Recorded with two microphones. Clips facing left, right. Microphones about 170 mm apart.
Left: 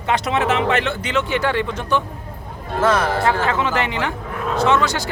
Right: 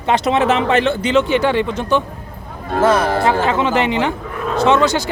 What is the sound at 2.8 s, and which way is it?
Speech, 10° right (ahead or behind).